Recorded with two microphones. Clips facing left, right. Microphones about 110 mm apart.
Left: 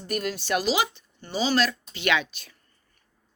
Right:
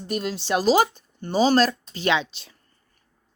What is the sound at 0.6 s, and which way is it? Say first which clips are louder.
Speech: right 6 dB; 45° right (ahead or behind).